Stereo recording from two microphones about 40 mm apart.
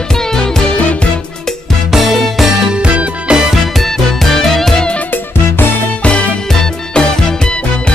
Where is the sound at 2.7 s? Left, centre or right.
Right.